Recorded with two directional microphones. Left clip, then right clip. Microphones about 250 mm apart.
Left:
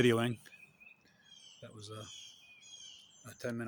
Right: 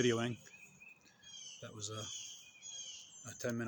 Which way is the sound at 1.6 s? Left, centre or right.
Centre.